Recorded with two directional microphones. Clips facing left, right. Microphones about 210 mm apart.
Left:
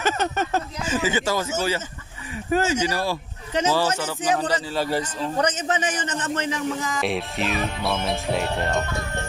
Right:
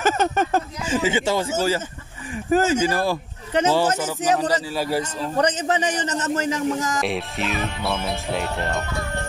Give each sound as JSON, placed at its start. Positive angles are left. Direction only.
{"t": 0.0, "sound": "speech", "side_deg": -50}
{"t": 0.9, "sound": "speech", "side_deg": -25}
{"t": 2.5, "sound": "speech", "side_deg": -45}
{"t": 4.6, "sound": "a man's voice", "side_deg": -10}
{"t": 5.4, "sound": "a man's voice", "side_deg": -35}
{"t": 7.0, "sound": "speech", "side_deg": 0}